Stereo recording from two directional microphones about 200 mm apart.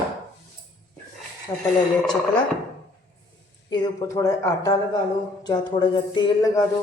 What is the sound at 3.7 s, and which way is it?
Speech, 20° left (ahead or behind).